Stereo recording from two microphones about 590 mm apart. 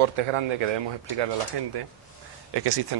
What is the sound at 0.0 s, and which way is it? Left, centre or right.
Speech, right.